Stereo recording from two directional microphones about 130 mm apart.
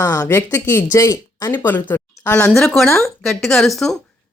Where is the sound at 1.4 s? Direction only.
15° left (ahead or behind).